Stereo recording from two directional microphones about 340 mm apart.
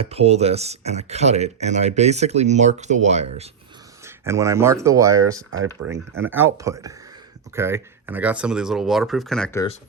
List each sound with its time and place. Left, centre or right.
0.0 s speech: centre
4.0 s speech: centre